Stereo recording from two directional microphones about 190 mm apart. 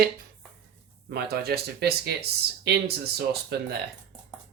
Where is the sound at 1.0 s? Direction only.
55° right (ahead or behind).